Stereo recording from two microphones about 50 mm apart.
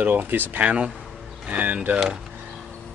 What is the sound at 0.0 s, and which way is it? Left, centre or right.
Speech, right.